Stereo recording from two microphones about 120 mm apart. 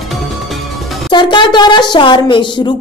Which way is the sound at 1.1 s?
40° left (ahead or behind).